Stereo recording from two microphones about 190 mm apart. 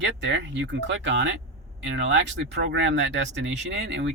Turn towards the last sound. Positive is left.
turn(degrees=-70)  # may be behind; listen again after turning